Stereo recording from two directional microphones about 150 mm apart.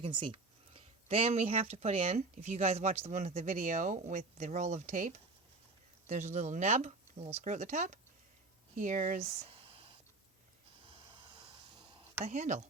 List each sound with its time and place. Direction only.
0.0 s speech: 35° right (ahead or behind)
10.8 s hiss: 35° right (ahead or behind)
12.2 s speech: 50° right (ahead or behind)